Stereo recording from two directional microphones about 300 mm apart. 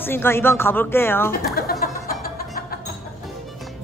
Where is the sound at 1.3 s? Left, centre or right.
Left.